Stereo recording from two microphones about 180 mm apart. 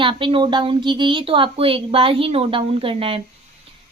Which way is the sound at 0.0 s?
30° right (ahead or behind).